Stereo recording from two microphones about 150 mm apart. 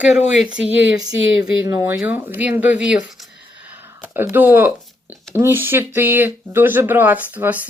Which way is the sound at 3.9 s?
15° right (ahead or behind).